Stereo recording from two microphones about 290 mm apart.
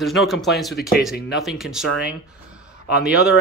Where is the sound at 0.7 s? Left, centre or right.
Left.